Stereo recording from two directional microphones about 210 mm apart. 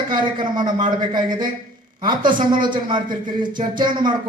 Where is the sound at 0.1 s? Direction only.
20° right (ahead or behind).